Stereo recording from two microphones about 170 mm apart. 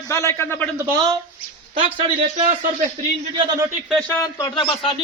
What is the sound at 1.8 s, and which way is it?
Speech, 35° right (ahead or behind).